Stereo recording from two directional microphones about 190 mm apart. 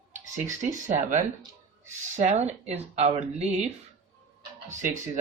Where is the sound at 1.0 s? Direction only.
40° right (ahead or behind).